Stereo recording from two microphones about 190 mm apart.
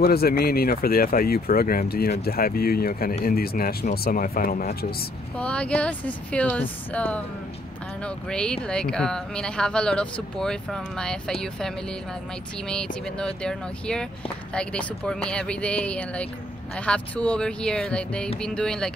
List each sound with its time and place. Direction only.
0.0 s speech: 55° left (ahead or behind)
5.4 s speech: 5° left (ahead or behind)
12.6 s speech: 5° left (ahead or behind)